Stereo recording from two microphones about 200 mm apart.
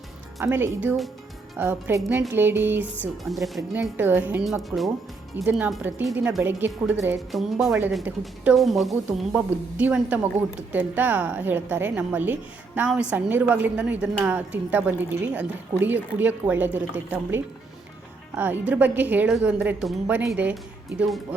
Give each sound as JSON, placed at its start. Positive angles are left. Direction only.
{"t": 0.3, "sound": "a woman's voice", "side_deg": -10}
{"t": 3.0, "sound": "a woman's voice", "side_deg": 0}